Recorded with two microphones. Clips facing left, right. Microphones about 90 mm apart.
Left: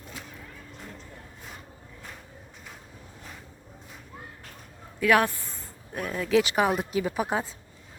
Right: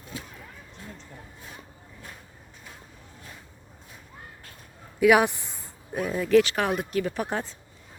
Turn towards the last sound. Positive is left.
turn(degrees=5)  # may be behind; listen again after turning